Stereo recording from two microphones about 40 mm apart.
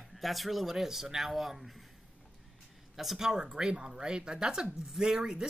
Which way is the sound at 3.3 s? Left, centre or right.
Centre.